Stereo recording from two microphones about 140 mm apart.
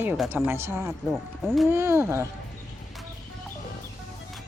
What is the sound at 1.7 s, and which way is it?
Speech, 15° right (ahead or behind).